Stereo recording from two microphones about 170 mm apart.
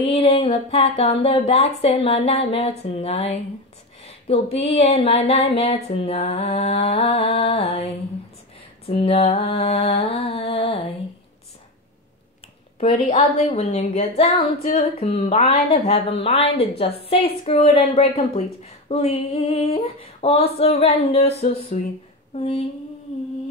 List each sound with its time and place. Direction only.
0.0 s speech: 35° left (ahead or behind)
4.0 s a sound: 35° left (ahead or behind)
4.6 s speech: 35° left (ahead or behind)
12.8 s speech: 35° left (ahead or behind)